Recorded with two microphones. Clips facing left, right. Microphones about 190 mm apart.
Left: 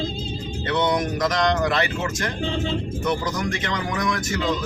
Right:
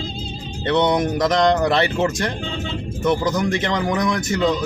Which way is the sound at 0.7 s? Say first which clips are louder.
Right 4 dB; 30° right (ahead or behind).